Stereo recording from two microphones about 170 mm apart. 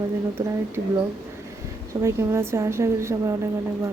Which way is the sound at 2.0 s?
15° right (ahead or behind).